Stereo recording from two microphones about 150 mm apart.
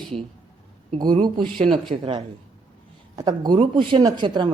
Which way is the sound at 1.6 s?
35° right (ahead or behind).